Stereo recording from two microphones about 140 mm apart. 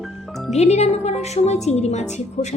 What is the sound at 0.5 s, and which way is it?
A woman's voice, 50° left (ahead or behind).